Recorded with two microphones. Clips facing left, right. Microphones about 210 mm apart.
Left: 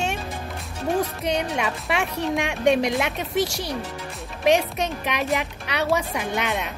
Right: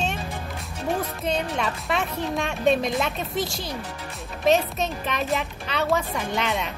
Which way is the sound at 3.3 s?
75° left (ahead or behind).